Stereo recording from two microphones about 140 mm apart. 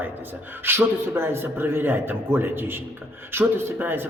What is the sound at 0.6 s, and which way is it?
A man's voice, 15° right (ahead or behind).